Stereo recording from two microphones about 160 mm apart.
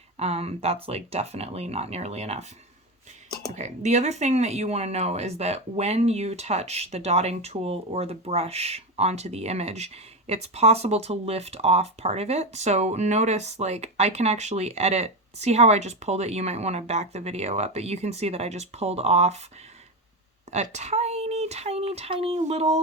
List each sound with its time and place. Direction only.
0.2 s speech: 40° right (ahead or behind)
3.5 s speech: 45° right (ahead or behind)
20.5 s speech: 45° right (ahead or behind)